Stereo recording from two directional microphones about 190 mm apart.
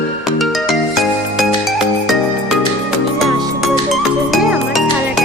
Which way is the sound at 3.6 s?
Centre (ahead or behind).